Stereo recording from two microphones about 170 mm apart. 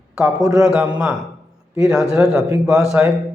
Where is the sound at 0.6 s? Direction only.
5° right (ahead or behind).